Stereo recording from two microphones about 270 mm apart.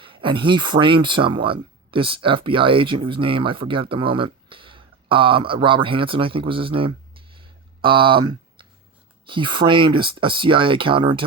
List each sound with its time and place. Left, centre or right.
0.0 s speech: centre
7.3 s a sound: centre
9.2 s speech: centre